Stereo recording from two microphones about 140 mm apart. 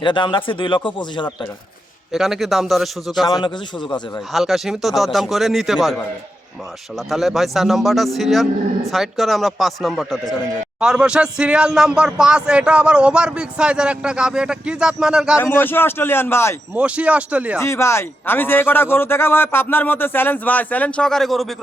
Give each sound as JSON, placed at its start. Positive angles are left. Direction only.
{"t": 0.0, "sound": "speech", "side_deg": 35}
{"t": 2.1, "sound": "speech", "side_deg": 0}
{"t": 3.4, "sound": "speech", "side_deg": 35}
{"t": 4.3, "sound": "speech", "side_deg": 0}
{"t": 7.1, "sound": "speech", "side_deg": 0}
{"t": 15.4, "sound": "a man's voice", "side_deg": 15}
{"t": 16.7, "sound": "speech", "side_deg": -10}
{"t": 17.6, "sound": "a man's voice", "side_deg": 20}